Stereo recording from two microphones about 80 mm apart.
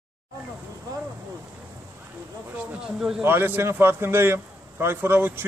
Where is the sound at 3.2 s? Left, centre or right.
Right.